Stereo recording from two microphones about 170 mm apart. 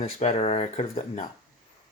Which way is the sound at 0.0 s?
40° left (ahead or behind).